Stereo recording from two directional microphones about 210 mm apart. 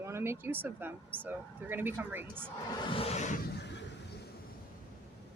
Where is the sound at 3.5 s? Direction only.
55° left (ahead or behind).